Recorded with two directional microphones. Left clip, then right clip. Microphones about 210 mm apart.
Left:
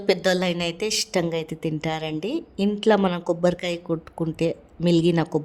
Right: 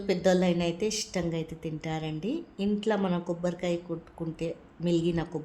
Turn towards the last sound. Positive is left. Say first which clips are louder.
# left 8 dB
turn(degrees=40)  # may be behind; listen again after turning